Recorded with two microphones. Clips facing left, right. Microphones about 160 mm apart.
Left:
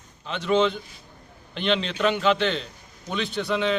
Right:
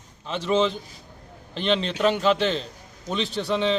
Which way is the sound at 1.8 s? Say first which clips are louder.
Right 2 dB; 5° right (ahead or behind).